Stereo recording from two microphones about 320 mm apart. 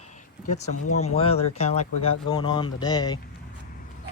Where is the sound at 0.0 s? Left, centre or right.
Left.